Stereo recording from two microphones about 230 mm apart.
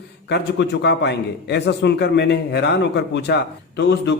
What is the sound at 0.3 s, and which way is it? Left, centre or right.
A man's voice, left.